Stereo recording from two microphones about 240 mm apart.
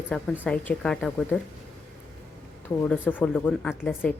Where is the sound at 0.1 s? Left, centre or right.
Centre.